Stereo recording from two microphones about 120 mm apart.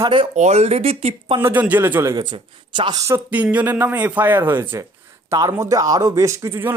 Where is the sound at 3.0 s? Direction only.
25° right (ahead or behind).